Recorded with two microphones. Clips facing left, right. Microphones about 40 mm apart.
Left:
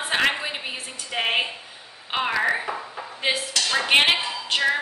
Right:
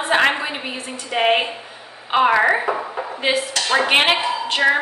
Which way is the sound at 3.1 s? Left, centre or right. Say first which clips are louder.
Right 5 dB; centre.